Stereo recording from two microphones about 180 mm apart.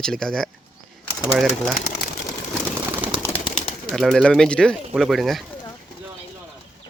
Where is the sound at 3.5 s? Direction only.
Centre (ahead or behind).